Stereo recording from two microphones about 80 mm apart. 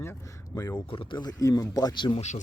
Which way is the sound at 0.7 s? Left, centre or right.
Left.